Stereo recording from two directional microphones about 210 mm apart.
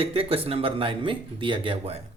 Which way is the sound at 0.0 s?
25° right (ahead or behind).